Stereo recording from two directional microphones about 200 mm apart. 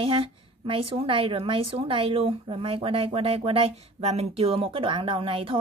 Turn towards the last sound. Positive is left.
turn(degrees=-25)  # may be behind; listen again after turning